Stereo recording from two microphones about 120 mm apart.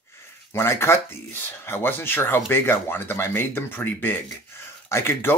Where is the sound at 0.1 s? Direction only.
20° left (ahead or behind).